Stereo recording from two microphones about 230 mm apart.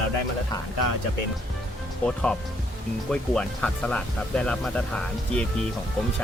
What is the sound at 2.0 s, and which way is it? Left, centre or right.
Speech, centre.